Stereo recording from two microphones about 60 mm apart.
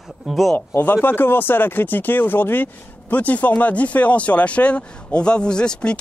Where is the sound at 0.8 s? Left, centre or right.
Left.